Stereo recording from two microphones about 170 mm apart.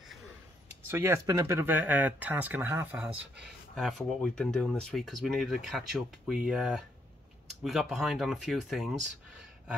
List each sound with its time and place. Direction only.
0.8 s speech: 15° right (ahead or behind)
3.7 s speech: centre (ahead or behind)